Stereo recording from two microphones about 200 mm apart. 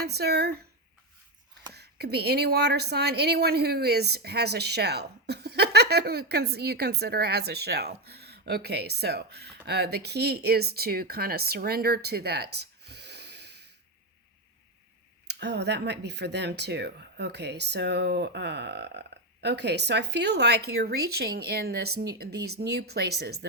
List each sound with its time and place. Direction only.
0.0 s speech: 55° right (ahead or behind)
1.7 s speech: 55° right (ahead or behind)
15.3 s speech: 60° right (ahead or behind)